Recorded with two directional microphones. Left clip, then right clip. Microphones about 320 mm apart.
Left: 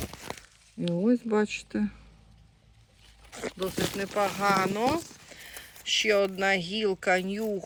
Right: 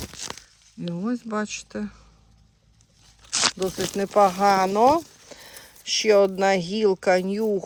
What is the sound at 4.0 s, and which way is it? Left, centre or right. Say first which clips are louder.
Speech: right 10 dB; centre.